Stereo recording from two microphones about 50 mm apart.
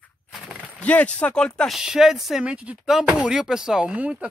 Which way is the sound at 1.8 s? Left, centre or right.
Centre.